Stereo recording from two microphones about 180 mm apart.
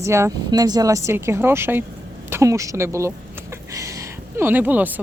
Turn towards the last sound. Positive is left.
turn(degrees=-10)  # may be behind; listen again after turning